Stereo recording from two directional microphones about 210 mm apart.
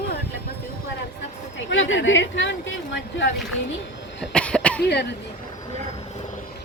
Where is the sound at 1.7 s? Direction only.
65° left (ahead or behind).